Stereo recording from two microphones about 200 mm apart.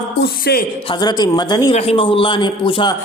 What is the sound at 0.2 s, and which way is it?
Speech, 50° left (ahead or behind).